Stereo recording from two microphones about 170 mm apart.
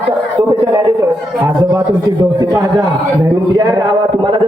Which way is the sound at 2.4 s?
20° right (ahead or behind).